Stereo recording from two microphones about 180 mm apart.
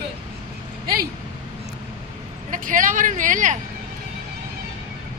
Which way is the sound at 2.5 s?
50° right (ahead or behind).